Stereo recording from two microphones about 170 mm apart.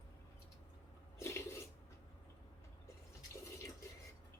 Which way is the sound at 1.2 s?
15° left (ahead or behind).